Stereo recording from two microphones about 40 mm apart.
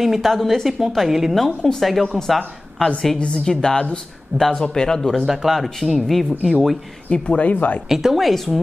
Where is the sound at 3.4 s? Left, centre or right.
Centre.